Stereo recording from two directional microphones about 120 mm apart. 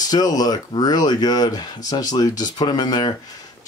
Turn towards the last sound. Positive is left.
turn(degrees=35)  # may be behind; listen again after turning